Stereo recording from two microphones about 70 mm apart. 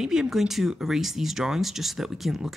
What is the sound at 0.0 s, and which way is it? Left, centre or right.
Speech, centre.